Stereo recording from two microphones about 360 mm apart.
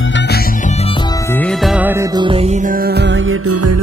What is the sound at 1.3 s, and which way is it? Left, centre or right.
Music, centre.